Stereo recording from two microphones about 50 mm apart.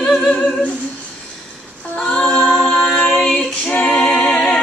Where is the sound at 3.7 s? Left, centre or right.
Left.